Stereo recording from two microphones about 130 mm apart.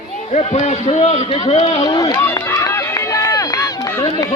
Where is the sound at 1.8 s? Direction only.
30° left (ahead or behind).